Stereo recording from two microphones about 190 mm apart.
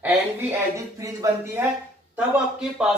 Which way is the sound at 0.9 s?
15° right (ahead or behind).